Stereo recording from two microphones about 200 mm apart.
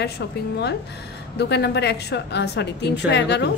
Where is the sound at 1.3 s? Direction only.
55° left (ahead or behind).